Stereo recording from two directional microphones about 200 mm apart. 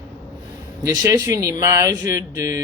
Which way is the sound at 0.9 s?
15° right (ahead or behind).